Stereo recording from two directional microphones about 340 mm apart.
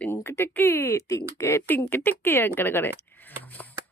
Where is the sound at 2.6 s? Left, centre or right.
Centre.